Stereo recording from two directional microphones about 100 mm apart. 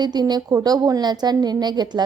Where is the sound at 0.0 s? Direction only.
45° right (ahead or behind).